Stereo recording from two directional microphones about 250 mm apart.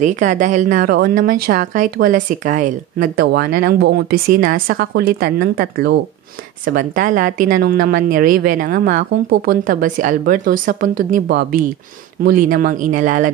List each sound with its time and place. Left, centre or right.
0.0 s a woman's voice: right